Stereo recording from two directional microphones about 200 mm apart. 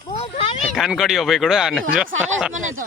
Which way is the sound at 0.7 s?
Centre (ahead or behind).